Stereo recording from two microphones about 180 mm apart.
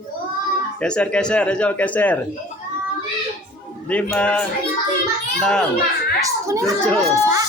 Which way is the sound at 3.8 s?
5° left (ahead or behind).